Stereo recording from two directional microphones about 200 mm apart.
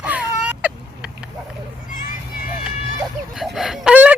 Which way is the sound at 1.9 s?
45° left (ahead or behind).